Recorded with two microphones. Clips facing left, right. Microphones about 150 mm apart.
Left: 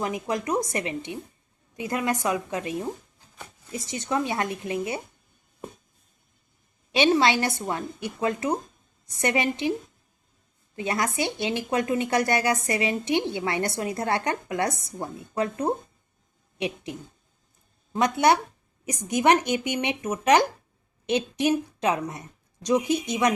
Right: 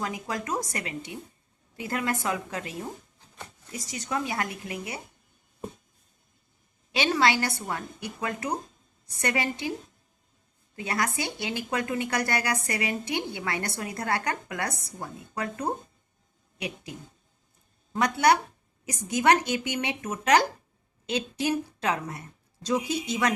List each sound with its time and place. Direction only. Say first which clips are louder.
0.0 s speech: left 4 dB; 20° left (ahead or behind)
6.9 s speech: left 4 dB; 25° left (ahead or behind)
10.8 s speech: left 3 dB; 25° left (ahead or behind)
17.9 s speech: left 2 dB; 20° left (ahead or behind)